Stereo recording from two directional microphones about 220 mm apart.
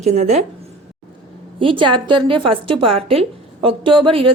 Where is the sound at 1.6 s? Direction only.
20° right (ahead or behind).